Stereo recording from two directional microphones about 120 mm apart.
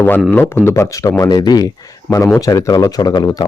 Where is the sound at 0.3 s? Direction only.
20° left (ahead or behind).